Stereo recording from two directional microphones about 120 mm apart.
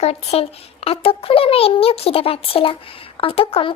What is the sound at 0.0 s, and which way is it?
A child's voice, 60° left (ahead or behind).